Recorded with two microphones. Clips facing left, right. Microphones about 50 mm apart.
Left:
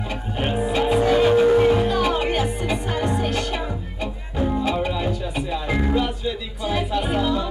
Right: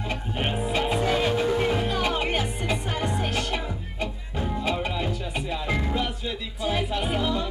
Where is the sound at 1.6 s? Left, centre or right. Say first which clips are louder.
Left 7 dB; centre.